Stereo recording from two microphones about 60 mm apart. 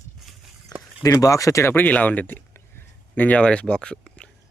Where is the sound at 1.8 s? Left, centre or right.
Left.